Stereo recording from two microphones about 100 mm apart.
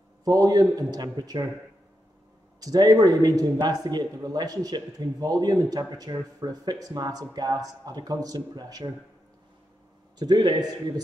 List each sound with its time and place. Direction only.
0.2 s speech: 40° right (ahead or behind)
2.6 s speech: 40° right (ahead or behind)
10.1 s a man's voice: 45° right (ahead or behind)